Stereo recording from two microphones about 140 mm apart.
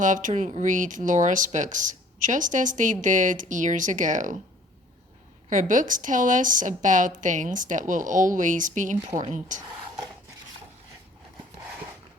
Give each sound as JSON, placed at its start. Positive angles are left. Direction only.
{"t": 0.0, "sound": "speech", "side_deg": -65}
{"t": 5.5, "sound": "speech", "side_deg": -65}